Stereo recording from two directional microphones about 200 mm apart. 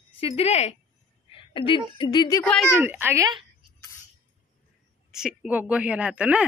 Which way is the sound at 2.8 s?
10° right (ahead or behind).